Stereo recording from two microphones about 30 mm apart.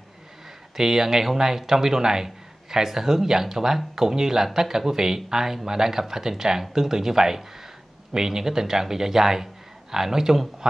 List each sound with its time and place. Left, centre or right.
0.7 s a man's voice: centre